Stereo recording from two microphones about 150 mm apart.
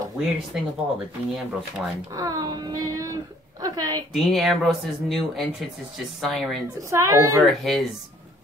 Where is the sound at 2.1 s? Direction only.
25° right (ahead or behind).